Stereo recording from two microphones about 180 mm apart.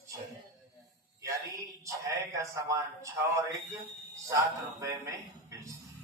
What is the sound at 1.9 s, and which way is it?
Speech, 15° right (ahead or behind).